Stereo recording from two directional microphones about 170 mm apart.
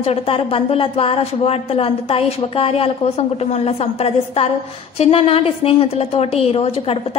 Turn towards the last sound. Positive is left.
turn(degrees=35)  # may be behind; listen again after turning